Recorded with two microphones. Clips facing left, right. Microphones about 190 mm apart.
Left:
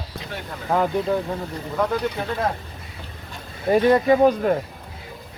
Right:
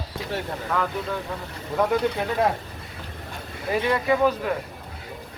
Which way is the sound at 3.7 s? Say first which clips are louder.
Left 6 dB; 40° left (ahead or behind).